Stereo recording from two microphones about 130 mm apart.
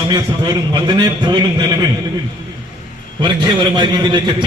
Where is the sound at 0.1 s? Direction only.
35° right (ahead or behind).